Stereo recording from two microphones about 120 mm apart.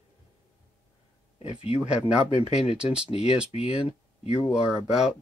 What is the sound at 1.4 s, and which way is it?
Speech, 55° left (ahead or behind).